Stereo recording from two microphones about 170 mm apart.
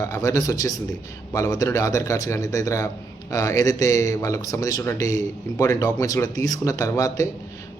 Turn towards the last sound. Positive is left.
turn(degrees=20)  # may be behind; listen again after turning